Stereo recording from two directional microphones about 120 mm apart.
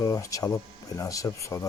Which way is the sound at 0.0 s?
25° left (ahead or behind).